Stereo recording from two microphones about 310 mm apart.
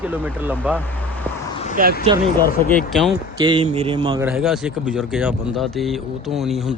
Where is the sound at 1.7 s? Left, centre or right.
Right.